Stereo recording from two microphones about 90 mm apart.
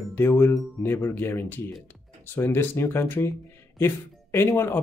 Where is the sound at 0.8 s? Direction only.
25° left (ahead or behind).